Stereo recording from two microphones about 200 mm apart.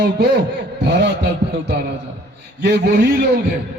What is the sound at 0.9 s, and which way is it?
A man's voice, 55° right (ahead or behind).